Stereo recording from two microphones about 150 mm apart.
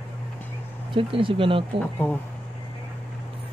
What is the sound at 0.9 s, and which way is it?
Speech, 35° right (ahead or behind).